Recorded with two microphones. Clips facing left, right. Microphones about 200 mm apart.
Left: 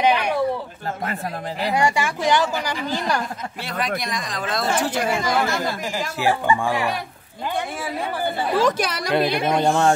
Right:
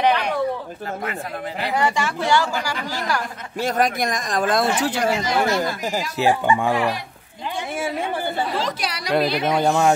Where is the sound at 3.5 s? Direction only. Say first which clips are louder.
Right 7 dB; 45° right (ahead or behind).